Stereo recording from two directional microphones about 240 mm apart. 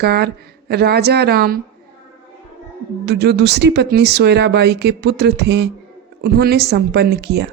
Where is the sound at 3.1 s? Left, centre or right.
Right.